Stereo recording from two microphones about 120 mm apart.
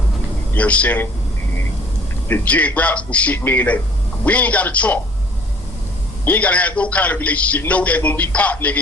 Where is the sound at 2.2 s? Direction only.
15° left (ahead or behind).